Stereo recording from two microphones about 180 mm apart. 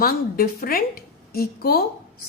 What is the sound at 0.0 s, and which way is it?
A woman's voice, 60° left (ahead or behind).